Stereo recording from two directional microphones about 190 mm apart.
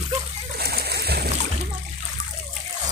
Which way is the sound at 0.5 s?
55° right (ahead or behind).